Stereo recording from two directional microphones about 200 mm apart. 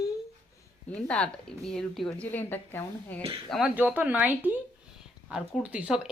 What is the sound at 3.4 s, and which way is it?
A woman's voice, centre (ahead or behind).